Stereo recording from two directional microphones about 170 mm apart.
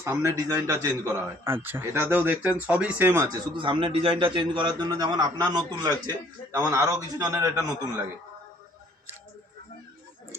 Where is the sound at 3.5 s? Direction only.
30° right (ahead or behind).